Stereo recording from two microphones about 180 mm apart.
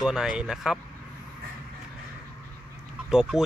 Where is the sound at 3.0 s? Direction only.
5° right (ahead or behind).